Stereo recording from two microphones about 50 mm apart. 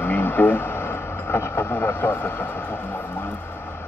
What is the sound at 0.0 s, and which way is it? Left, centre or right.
Vehicle, left.